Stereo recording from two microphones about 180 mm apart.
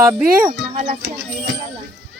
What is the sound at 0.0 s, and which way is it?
Speech, 15° right (ahead or behind).